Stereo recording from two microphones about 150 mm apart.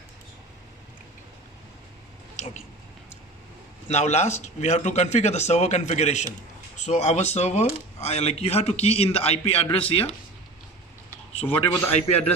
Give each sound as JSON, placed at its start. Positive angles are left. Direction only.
{"t": 2.3, "sound": "a sound", "side_deg": 50}
{"t": 3.8, "sound": "speech", "side_deg": 45}
{"t": 11.4, "sound": "speech", "side_deg": 10}